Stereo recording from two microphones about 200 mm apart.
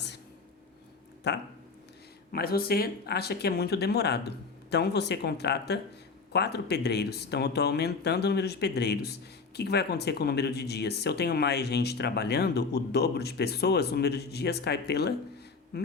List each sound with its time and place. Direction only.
1.2 s speech: 55° left (ahead or behind)